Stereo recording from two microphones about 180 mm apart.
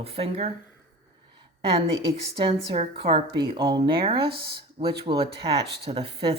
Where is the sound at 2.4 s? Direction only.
30° right (ahead or behind).